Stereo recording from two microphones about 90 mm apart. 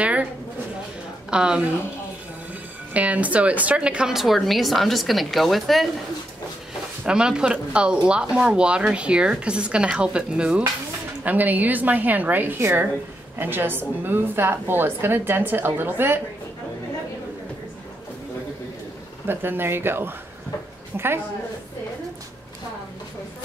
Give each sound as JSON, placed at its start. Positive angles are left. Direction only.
{"t": 0.0, "sound": "pigeon", "side_deg": -15}
{"t": 1.3, "sound": "speech", "side_deg": -10}
{"t": 2.9, "sound": "a woman's voice", "side_deg": -15}
{"t": 7.1, "sound": "a woman's voice", "side_deg": -10}
{"t": 19.2, "sound": "a woman's voice", "side_deg": -25}